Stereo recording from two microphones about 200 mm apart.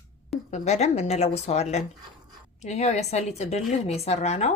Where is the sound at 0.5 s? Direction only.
35° left (ahead or behind).